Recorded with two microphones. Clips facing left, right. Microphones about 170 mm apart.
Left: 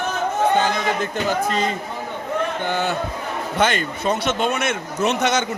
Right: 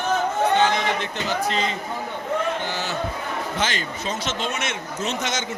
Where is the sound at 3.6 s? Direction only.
60° left (ahead or behind).